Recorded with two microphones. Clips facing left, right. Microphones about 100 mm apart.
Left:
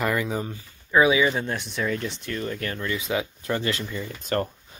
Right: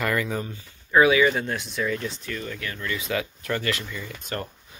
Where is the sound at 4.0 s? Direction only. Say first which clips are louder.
Left 6 dB; 45° left (ahead or behind).